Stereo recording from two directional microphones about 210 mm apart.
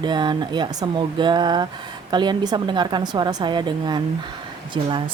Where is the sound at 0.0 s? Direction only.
20° right (ahead or behind).